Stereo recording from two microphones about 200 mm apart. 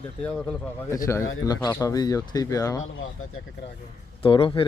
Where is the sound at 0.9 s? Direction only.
15° left (ahead or behind).